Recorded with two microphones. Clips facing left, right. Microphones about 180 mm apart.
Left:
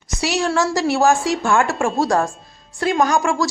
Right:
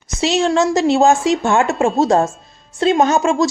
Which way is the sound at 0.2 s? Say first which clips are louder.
Right 4 dB; 20° right (ahead or behind).